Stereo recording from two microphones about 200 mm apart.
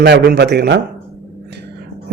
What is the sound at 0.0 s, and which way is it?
Speech, 55° right (ahead or behind).